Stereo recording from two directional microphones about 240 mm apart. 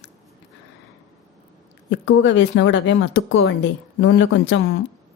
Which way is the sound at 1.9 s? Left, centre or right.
Left.